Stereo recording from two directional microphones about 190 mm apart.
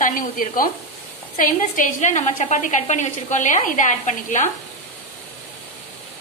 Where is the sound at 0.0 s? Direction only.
45° left (ahead or behind).